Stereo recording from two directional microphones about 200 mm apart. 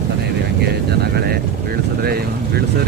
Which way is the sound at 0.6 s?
55° right (ahead or behind).